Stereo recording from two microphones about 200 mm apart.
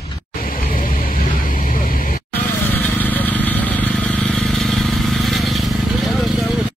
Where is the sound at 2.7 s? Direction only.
10° left (ahead or behind).